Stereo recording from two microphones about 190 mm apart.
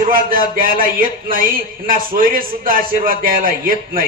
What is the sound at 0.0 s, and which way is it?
Speech, 50° right (ahead or behind).